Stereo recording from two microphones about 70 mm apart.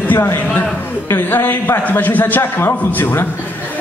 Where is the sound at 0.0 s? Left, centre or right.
Left.